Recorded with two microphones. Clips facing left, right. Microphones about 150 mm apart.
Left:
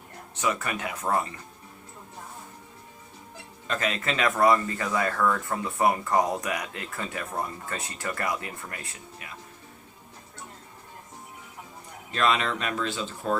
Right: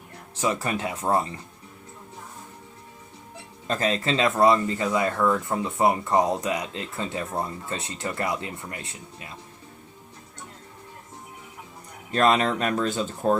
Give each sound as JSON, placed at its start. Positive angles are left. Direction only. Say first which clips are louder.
{"t": 0.3, "sound": "speech", "louder": "right 3 dB", "side_deg": -30}
{"t": 3.7, "sound": "speech", "louder": "right 4 dB", "side_deg": -35}
{"t": 12.1, "sound": "speech", "louder": "right 5 dB", "side_deg": -40}